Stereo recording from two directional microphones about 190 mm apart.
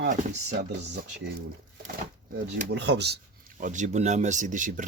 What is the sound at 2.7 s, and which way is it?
Speech, 65° right (ahead or behind).